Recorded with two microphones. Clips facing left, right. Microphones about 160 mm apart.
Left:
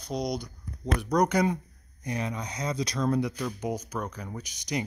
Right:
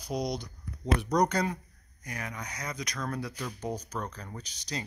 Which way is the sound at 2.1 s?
25° left (ahead or behind).